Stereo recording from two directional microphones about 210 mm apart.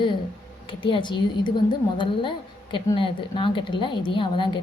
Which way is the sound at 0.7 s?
25° left (ahead or behind).